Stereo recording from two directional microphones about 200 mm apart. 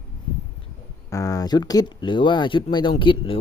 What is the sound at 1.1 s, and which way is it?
A man's voice, 15° left (ahead or behind).